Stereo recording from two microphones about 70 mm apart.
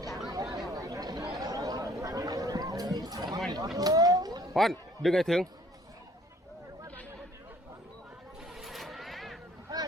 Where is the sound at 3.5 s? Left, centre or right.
Right.